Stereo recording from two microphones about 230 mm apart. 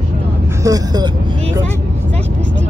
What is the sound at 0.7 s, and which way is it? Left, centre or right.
Speech, centre.